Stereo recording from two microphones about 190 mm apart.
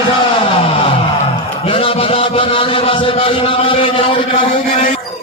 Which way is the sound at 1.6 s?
30° left (ahead or behind).